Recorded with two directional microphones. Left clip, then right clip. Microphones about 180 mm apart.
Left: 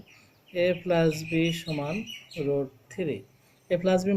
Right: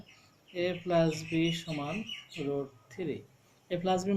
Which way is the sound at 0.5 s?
55° left (ahead or behind).